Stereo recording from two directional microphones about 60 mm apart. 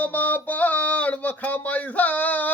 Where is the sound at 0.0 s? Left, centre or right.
Left.